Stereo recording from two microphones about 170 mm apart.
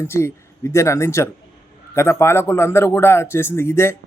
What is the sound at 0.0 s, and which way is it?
Speech, 15° left (ahead or behind).